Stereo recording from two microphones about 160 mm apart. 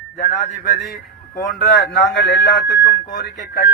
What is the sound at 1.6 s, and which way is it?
Speech, 85° left.